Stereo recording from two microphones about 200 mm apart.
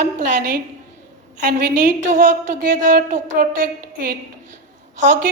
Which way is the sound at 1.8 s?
40° right (ahead or behind).